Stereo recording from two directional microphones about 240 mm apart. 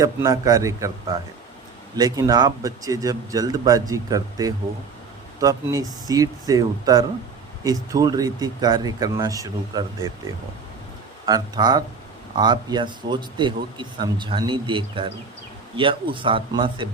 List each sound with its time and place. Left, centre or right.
0.0 s a man's voice: centre
11.3 s a man's voice: centre